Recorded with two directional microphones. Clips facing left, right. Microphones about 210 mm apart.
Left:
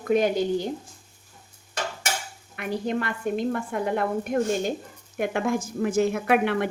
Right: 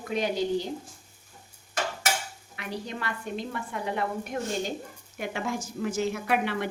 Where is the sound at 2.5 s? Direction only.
55° left (ahead or behind).